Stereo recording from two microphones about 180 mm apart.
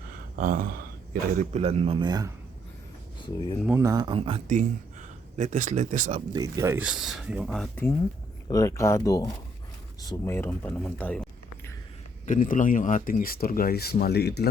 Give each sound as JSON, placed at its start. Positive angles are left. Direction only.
{"t": 0.3, "sound": "a sound", "side_deg": -50}
{"t": 1.4, "sound": "speech", "side_deg": -35}
{"t": 3.2, "sound": "speech", "side_deg": 25}
{"t": 3.7, "sound": "speech", "side_deg": -15}
{"t": 4.4, "sound": "speech", "side_deg": -45}
{"t": 6.3, "sound": "speech", "side_deg": -15}
{"t": 6.8, "sound": "speech", "side_deg": 0}
{"t": 8.4, "sound": "speech", "side_deg": 20}
{"t": 12.2, "sound": "speech", "side_deg": 45}